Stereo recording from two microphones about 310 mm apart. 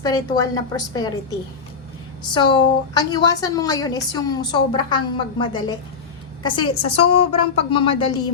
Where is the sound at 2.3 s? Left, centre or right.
Centre.